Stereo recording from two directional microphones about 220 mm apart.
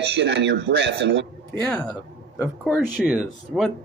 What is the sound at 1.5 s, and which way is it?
Speech, 10° left (ahead or behind).